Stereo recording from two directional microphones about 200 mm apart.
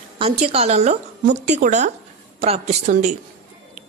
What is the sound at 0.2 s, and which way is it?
A woman's voice, 30° right (ahead or behind).